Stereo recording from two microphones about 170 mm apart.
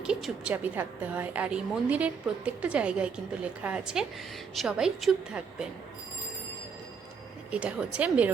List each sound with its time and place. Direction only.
0.0 s a woman's voice: 5° right (ahead or behind)
7.5 s a woman's voice: 5° right (ahead or behind)